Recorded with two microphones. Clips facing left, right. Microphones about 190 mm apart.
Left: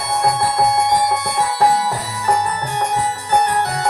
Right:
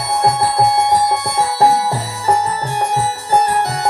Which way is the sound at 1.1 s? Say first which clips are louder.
Right 2 dB; 30° right (ahead or behind).